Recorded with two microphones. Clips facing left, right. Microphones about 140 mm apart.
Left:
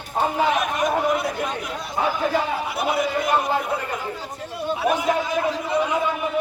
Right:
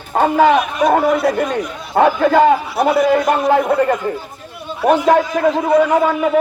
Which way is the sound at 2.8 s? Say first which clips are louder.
Right 10 dB; 85° right.